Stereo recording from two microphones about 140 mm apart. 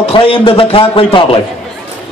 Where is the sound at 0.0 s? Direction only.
40° left (ahead or behind).